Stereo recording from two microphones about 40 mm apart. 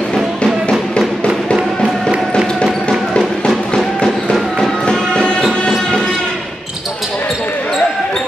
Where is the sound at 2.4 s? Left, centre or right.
Centre.